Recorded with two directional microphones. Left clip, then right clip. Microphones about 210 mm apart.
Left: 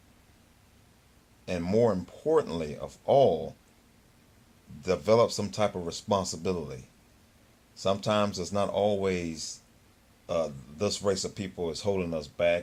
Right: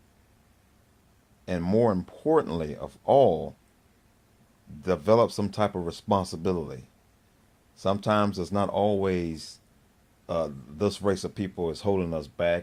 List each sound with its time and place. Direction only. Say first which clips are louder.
1.5 s speech: right 1 dB; 40° right (ahead or behind)
4.8 s speech: right 2 dB; 40° right (ahead or behind)
7.8 s speech: right 2 dB; 40° right (ahead or behind)